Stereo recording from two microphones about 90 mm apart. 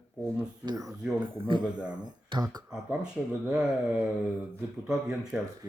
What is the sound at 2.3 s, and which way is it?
Speech, 55° right (ahead or behind).